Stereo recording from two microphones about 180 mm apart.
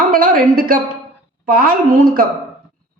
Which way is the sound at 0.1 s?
50° right (ahead or behind).